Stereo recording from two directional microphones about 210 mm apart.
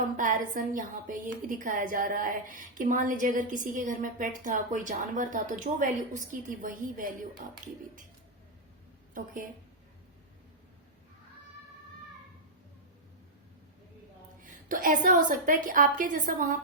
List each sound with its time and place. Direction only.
0.2 s a woman's voice: 40° right (ahead or behind)
9.1 s a woman's voice: 40° right (ahead or behind)
14.4 s a woman's voice: 40° right (ahead or behind)